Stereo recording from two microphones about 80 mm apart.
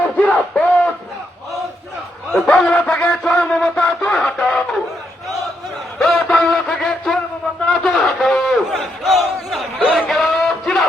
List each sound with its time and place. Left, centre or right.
0.2 s a sound: centre
2.3 s music: centre
6.0 s music: centre
7.7 s battle cry: centre
10.1 s music: centre